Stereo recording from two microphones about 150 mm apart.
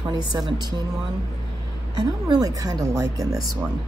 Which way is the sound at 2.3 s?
25° right (ahead or behind).